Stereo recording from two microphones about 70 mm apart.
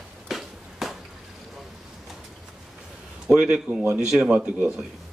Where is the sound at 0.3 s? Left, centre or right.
Centre.